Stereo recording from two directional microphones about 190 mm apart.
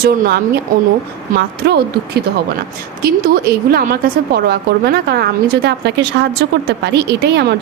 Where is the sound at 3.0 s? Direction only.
55° right (ahead or behind).